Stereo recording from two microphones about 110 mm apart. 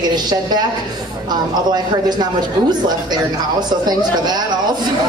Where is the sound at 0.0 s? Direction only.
40° right (ahead or behind).